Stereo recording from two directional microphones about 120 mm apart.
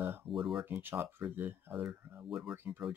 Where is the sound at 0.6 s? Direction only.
15° right (ahead or behind).